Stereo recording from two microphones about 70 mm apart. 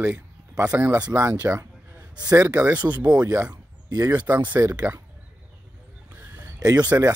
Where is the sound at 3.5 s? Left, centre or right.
Right.